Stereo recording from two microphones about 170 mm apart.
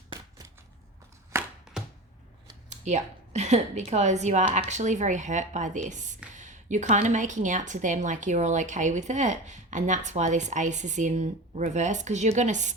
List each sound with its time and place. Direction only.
0.1 s a sound: 20° right (ahead or behind)
1.3 s chopping: 15° right (ahead or behind)
2.6 s a woman's voice: 45° right (ahead or behind)